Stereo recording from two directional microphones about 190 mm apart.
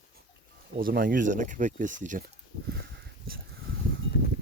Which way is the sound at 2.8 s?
55° right (ahead or behind).